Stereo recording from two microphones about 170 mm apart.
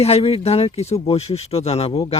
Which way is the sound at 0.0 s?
35° left (ahead or behind).